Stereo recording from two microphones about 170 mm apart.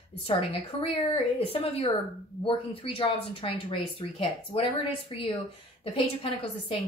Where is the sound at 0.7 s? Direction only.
35° left (ahead or behind).